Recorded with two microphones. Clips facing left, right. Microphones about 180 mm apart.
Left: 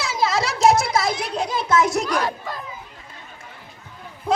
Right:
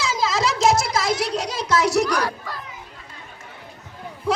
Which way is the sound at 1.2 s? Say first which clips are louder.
Even; 80° right.